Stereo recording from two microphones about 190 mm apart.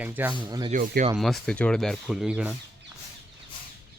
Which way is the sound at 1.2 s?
Centre (ahead or behind).